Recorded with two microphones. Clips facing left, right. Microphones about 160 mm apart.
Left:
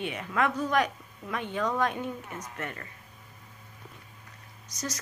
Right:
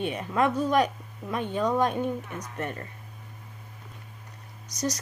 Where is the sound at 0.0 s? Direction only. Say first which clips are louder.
Right 3 dB; 35° right (ahead or behind).